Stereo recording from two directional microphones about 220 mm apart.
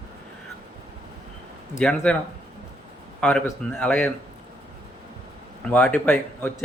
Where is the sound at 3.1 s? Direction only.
5° left (ahead or behind).